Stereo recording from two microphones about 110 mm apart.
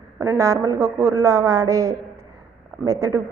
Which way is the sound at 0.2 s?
25° right (ahead or behind).